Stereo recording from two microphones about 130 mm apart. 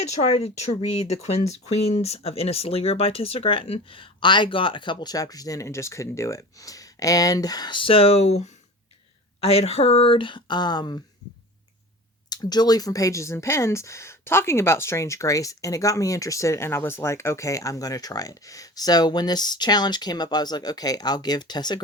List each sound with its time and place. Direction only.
0.0 s speech: 55° left (ahead or behind); by 11.0 s 35° left (ahead or behind)
12.3 s speech: 30° left (ahead or behind)